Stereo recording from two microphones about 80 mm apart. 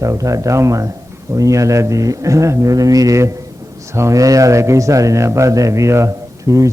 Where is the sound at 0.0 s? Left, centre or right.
Right.